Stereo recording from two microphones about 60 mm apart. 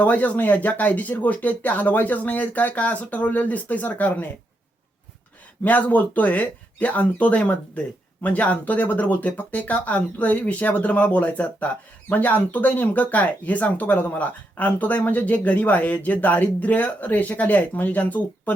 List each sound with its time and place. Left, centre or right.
0.0 s speech: left
5.6 s speech: left